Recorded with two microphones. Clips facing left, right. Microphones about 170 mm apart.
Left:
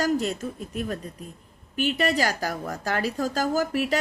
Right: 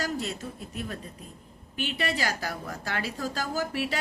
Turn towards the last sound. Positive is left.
turn(degrees=45)  # may be behind; listen again after turning